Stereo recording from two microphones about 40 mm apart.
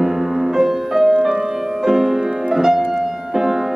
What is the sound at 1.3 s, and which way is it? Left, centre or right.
Music, centre.